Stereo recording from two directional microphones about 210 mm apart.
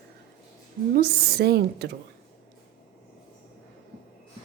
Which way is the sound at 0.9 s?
45° right (ahead or behind).